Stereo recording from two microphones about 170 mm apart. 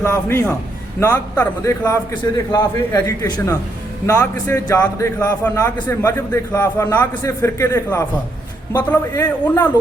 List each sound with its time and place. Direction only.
0.0 s a man's voice: 15° left (ahead or behind)